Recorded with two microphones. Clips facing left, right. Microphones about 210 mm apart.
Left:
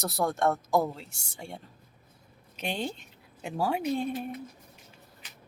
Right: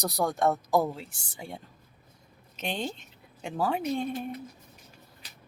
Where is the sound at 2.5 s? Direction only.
10° left (ahead or behind).